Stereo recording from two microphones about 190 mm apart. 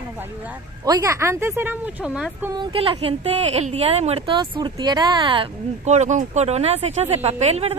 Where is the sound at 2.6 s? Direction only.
25° right (ahead or behind).